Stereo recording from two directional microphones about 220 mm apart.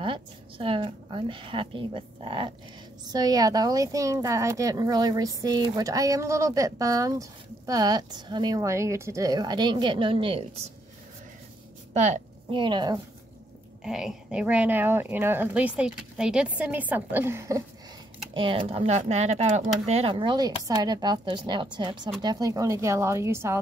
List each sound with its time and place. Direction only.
0.0 s a woman's voice: 25° right (ahead or behind)
11.9 s a woman's voice: 30° right (ahead or behind)
13.8 s a woman's voice: 5° right (ahead or behind)
18.3 s a woman's voice: 25° right (ahead or behind)